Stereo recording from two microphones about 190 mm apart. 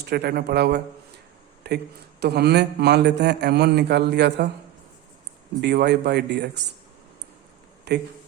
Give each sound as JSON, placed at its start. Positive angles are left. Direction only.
{"t": 0.0, "sound": "a man's voice", "side_deg": -60}
{"t": 5.5, "sound": "a man's voice", "side_deg": -60}
{"t": 7.9, "sound": "speech", "side_deg": -60}